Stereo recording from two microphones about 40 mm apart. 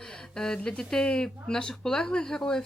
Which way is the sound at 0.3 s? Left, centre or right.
Centre.